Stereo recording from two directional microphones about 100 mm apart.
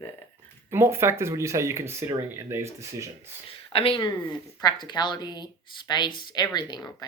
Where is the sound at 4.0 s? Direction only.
45° left (ahead or behind).